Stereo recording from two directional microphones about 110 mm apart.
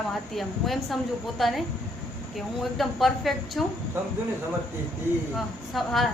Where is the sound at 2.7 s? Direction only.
Centre (ahead or behind).